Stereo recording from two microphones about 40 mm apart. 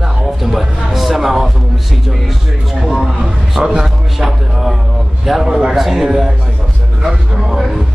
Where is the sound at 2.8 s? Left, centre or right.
Centre.